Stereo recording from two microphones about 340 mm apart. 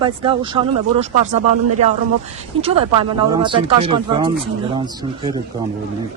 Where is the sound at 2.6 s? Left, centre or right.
Centre.